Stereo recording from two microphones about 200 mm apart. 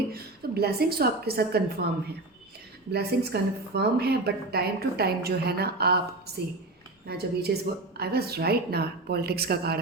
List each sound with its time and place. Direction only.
0.1 s a woman's voice: 50° right (ahead or behind)
2.9 s a woman's voice: 55° right (ahead or behind)